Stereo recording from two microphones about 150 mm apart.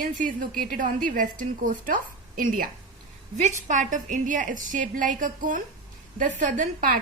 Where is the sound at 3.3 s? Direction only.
55° right (ahead or behind).